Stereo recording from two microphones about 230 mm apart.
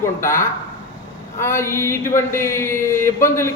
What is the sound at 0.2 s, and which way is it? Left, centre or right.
Speech, centre.